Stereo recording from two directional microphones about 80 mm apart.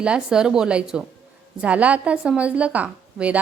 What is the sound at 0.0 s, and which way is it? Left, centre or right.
A woman's voice, centre.